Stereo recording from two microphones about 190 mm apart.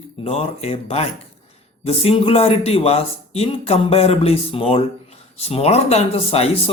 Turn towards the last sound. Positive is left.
turn(degrees=30)  # may be behind; listen again after turning